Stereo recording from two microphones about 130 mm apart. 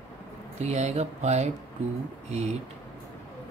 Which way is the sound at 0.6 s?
55° right (ahead or behind).